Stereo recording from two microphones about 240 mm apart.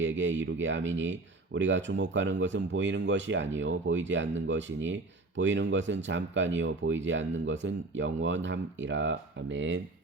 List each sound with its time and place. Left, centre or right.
0.0 s speech: right